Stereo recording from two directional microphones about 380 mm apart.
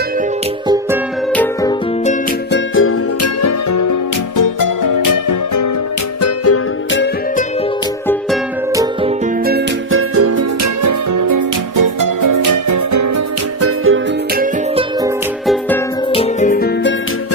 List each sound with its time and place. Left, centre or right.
1.3 s music: centre
2.0 s music: left
6.2 s music: left
9.5 s music: right
13.6 s music: right
15.4 s music: centre
16.1 s music: centre